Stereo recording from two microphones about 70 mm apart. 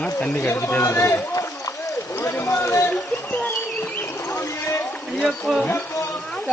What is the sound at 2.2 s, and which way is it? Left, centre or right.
Run, left.